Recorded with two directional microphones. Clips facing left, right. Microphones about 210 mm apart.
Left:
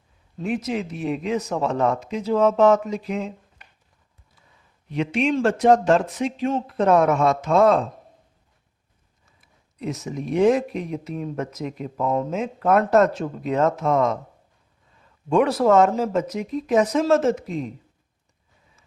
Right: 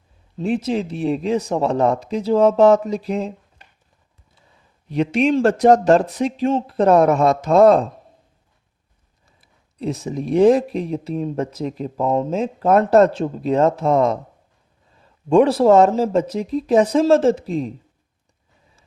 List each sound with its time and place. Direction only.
0.3 s speech: 30° right (ahead or behind)
4.9 s speech: 35° right (ahead or behind)
9.2 s speech: 30° right (ahead or behind)